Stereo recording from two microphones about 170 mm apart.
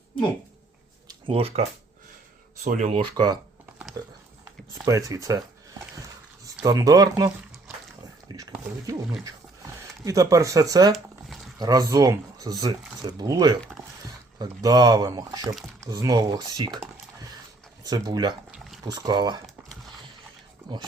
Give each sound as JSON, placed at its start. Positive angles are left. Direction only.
{"t": 1.3, "sound": "speech", "side_deg": -35}
{"t": 2.6, "sound": "speech", "side_deg": -45}
{"t": 3.0, "sound": "speech", "side_deg": -25}
{"t": 6.7, "sound": "speech", "side_deg": -20}
{"t": 8.3, "sound": "speech", "side_deg": -20}
{"t": 10.0, "sound": "speech", "side_deg": -20}
{"t": 13.6, "sound": "a sound", "side_deg": 0}
{"t": 14.3, "sound": "speech", "side_deg": -20}
{"t": 17.8, "sound": "speech", "side_deg": -25}
{"t": 18.5, "sound": "a sound", "side_deg": 0}
{"t": 18.8, "sound": "speech", "side_deg": -20}